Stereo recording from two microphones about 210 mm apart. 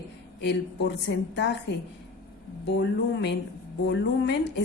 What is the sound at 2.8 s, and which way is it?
A woman's voice, 55° left (ahead or behind).